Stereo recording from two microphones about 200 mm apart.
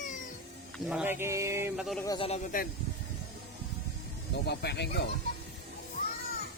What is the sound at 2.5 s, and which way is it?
Speech, 45° left (ahead or behind).